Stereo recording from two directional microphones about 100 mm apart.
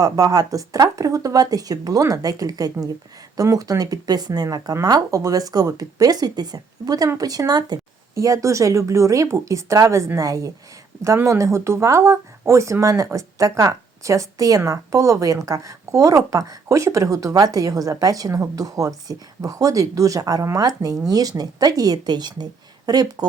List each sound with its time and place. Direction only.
0.0 s speech: 35° right (ahead or behind)